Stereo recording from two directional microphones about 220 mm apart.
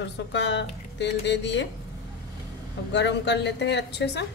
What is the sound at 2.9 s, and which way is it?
A woman's voice, 50° left (ahead or behind).